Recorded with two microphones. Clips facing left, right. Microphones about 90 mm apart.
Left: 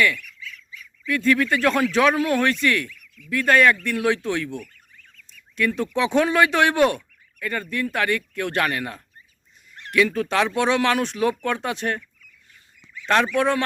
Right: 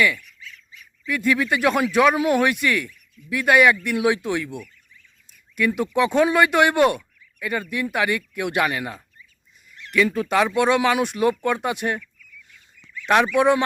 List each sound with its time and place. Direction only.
1.0 s speech: 5° right (ahead or behind)
2.9 s a sound: 75° left (ahead or behind)
3.2 s speech: 10° right (ahead or behind)
4.5 s fowl: 60° left (ahead or behind)
5.5 s speech: 10° right (ahead or behind)
9.8 s a sound: 40° left (ahead or behind)
10.1 s speech: 5° right (ahead or behind)
13.1 s speech: 15° right (ahead or behind)